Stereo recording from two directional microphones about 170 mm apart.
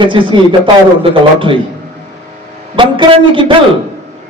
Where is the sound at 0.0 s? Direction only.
30° right (ahead or behind).